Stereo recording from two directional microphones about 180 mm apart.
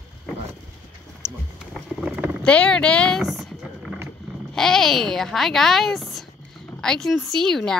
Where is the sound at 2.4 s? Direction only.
5° left (ahead or behind).